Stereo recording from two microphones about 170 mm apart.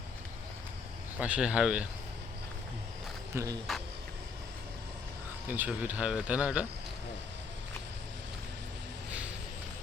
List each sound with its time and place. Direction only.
1.2 s speech: 5° right (ahead or behind)
3.3 s speech: 20° right (ahead or behind)
5.5 s speech: 10° right (ahead or behind)